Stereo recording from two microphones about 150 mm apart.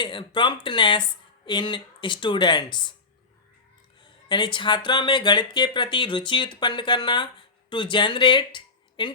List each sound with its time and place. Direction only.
0.0 s speech: 30° left (ahead or behind)
4.0 s speech: 30° left (ahead or behind)